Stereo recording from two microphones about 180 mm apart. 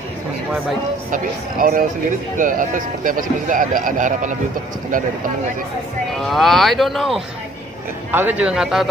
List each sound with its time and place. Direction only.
1.1 s speech: 50° right (ahead or behind)
6.2 s a man's voice: centre (ahead or behind)